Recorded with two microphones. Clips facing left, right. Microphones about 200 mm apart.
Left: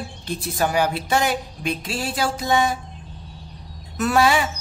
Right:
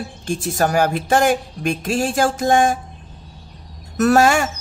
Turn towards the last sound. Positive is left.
turn(degrees=-45)  # may be behind; listen again after turning